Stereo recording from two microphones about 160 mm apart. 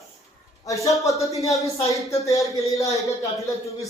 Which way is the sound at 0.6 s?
20° left (ahead or behind).